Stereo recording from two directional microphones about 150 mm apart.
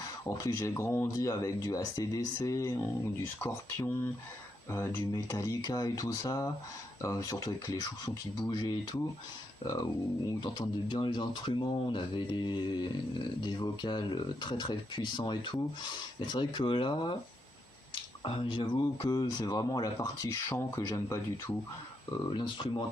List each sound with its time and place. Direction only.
0.3 s speech: 20° left (ahead or behind)
10.4 s speech: 30° left (ahead or behind)
18.2 s speech: 35° left (ahead or behind)
22.1 s speech: 30° left (ahead or behind)